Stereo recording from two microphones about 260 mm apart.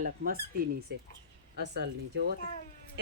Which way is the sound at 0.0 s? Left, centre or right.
Right.